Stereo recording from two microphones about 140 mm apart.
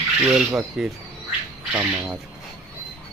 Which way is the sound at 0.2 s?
5° right (ahead or behind).